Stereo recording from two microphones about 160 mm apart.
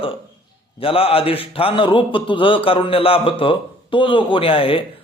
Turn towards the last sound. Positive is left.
turn(degrees=35)  # may be behind; listen again after turning